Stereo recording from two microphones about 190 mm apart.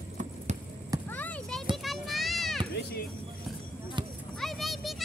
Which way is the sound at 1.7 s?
Centre (ahead or behind).